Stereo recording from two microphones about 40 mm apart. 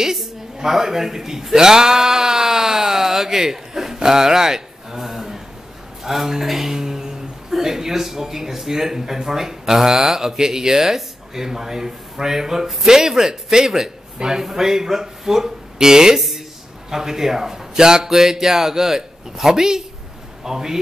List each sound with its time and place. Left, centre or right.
0.0 s speech: centre